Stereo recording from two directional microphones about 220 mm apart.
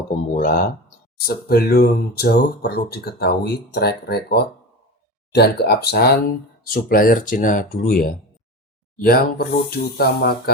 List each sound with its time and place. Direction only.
0.1 s speech: 40° left (ahead or behind)